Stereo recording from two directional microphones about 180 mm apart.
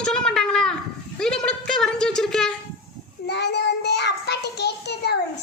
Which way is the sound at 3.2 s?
70° left (ahead or behind).